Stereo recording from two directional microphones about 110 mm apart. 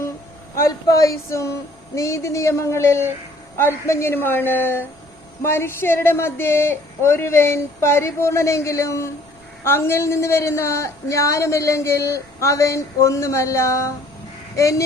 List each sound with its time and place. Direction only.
0.5 s a woman's voice: 30° left (ahead or behind)